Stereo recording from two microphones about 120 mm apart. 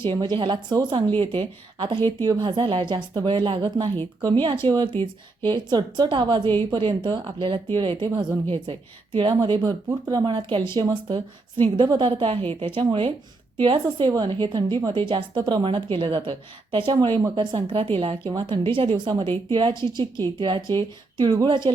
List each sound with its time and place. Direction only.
0.0 s a woman's voice: 40° right (ahead or behind)
2.0 s speech: 20° left (ahead or behind)
2.4 s a woman's voice: 45° right (ahead or behind)
11.8 s a woman's voice: 40° right (ahead or behind)